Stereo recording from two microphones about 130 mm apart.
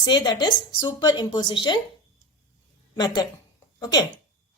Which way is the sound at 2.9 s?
30° left (ahead or behind).